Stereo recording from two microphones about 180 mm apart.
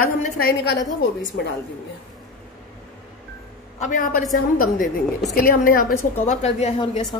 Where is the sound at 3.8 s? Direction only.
45° left (ahead or behind); by 7.2 s 30° left (ahead or behind).